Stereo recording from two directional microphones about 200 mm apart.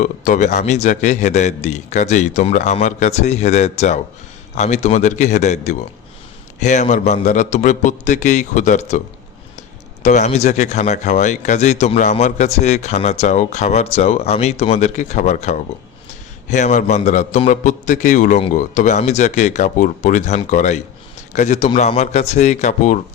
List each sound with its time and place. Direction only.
0.0 s speech: 40° left (ahead or behind)
10.0 s speech: 35° left (ahead or behind)